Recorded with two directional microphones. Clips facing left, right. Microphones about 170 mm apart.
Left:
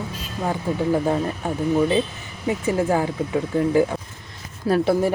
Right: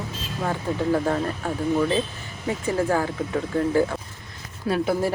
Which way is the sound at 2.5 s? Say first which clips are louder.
Left 2 dB; 20° left (ahead or behind).